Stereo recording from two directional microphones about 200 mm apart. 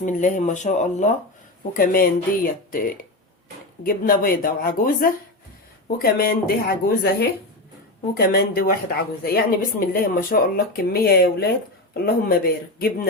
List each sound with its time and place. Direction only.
0.0 s a woman's voice: 40° left (ahead or behind)